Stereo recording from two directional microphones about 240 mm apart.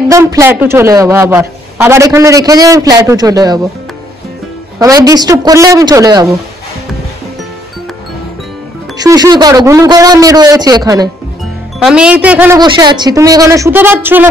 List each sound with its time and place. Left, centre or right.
0.1 s a man's voice: centre
4.7 s a man's voice: centre
8.9 s a man's voice: centre
11.8 s a man's voice: centre